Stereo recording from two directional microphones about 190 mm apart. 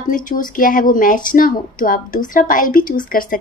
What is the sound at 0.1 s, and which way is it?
A woman's voice, 45° left (ahead or behind).